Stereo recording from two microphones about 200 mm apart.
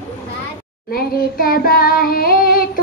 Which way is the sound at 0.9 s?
50° left (ahead or behind).